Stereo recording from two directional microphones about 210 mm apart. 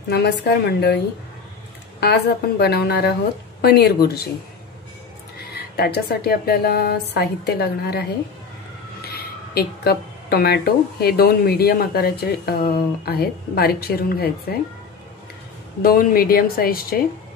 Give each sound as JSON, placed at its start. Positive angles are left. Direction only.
{"t": 0.1, "sound": "speech", "side_deg": 50}
{"t": 2.0, "sound": "speech", "side_deg": 50}
{"t": 5.5, "sound": "speech", "side_deg": 50}
{"t": 9.1, "sound": "speech", "side_deg": 50}
{"t": 15.8, "sound": "speech", "side_deg": 45}